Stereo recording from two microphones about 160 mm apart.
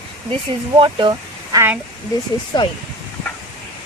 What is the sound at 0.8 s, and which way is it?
Speech, 30° right (ahead or behind).